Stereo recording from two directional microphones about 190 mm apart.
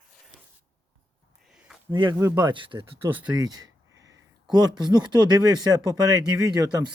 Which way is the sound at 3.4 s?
20° right (ahead or behind).